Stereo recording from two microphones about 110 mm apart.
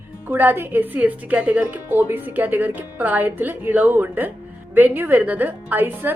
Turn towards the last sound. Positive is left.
turn(degrees=-15)  # may be behind; listen again after turning